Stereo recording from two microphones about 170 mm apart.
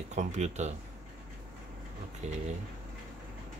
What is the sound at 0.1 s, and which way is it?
Speech, 45° right (ahead or behind).